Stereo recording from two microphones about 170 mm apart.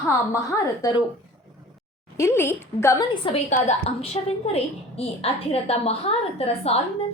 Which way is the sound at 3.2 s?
40° left (ahead or behind).